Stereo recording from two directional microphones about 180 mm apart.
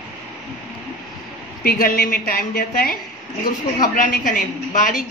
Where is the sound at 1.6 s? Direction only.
55° left (ahead or behind).